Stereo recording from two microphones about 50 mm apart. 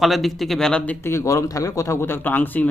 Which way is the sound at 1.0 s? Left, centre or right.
Left.